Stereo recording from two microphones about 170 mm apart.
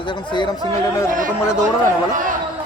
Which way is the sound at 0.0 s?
25° left (ahead or behind).